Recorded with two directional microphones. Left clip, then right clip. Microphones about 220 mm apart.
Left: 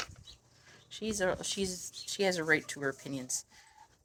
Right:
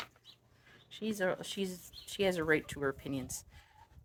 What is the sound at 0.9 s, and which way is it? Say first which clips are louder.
Speech: left 2 dB; 5° left (ahead or behind).